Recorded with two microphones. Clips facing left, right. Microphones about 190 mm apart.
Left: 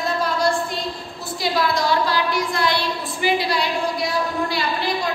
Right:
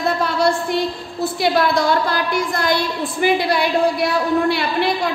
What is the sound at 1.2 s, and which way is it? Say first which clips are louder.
A woman's voice: right 5 dB; 60° right (ahead or behind).